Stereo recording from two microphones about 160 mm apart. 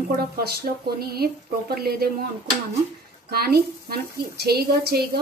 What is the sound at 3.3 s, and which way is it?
A woman's voice, 75° right (ahead or behind).